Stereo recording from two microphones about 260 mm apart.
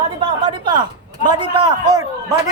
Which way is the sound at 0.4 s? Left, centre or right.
Centre.